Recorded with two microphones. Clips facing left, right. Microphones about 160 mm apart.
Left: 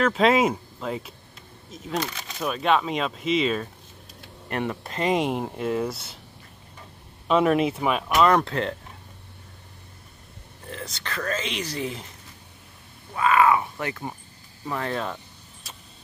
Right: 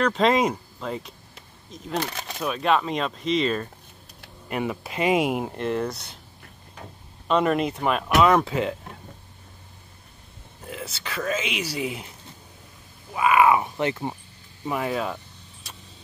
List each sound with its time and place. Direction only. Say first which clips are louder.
0.0 s speech: left 1 dB; 5° left (ahead or behind)
7.2 s speech: left 2 dB; centre (ahead or behind)
10.7 s speech: even; 5° right (ahead or behind)
13.1 s speech: right 1 dB; 15° right (ahead or behind)
14.6 s speech: right 2 dB; 10° right (ahead or behind)